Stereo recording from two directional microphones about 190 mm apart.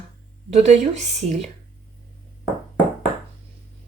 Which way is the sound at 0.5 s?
35° right (ahead or behind).